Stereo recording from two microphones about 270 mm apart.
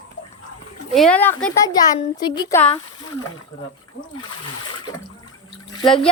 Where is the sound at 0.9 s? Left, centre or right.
Centre.